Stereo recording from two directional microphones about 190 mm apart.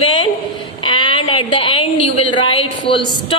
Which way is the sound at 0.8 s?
25° left (ahead or behind).